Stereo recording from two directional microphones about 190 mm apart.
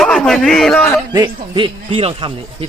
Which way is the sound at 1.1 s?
25° right (ahead or behind).